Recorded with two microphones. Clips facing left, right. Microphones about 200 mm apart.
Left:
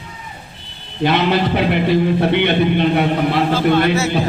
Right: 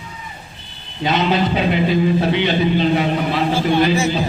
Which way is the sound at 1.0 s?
65° left (ahead or behind).